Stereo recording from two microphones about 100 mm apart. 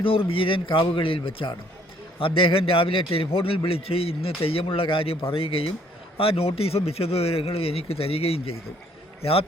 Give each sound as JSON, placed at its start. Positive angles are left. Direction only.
{"t": 0.0, "sound": "a man's voice", "side_deg": 65}